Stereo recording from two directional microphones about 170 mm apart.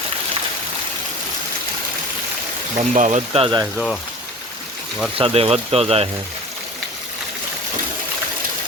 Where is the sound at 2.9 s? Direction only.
45° right (ahead or behind).